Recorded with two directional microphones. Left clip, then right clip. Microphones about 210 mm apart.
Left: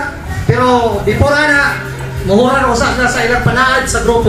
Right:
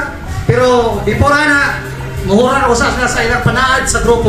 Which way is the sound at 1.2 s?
45° right (ahead or behind).